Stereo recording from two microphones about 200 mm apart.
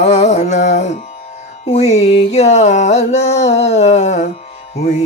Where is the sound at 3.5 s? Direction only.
30° left (ahead or behind).